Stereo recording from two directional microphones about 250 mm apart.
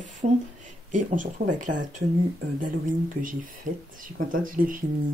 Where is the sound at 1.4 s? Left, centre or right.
Right.